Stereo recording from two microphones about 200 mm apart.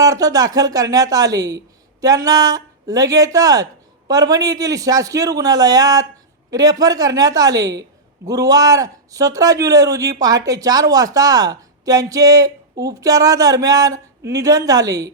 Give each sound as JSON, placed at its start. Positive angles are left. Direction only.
{"t": 0.0, "sound": "a man's voice", "side_deg": -20}